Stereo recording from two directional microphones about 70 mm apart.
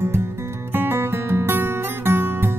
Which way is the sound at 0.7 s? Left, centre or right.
Right.